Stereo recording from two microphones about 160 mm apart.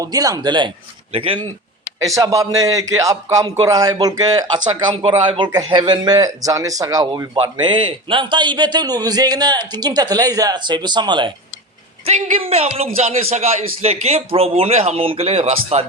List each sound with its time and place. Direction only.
0.0 s a man's voice: 25° right (ahead or behind)
1.8 s a man's voice: 20° right (ahead or behind)
7.3 s a man's voice: 30° right (ahead or behind)
12.0 s a man's voice: 40° right (ahead or behind)